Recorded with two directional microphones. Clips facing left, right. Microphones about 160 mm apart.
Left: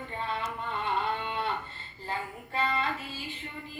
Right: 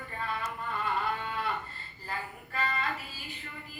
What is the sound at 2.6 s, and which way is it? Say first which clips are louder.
Child singing: left 3 dB; 30° left (ahead or behind).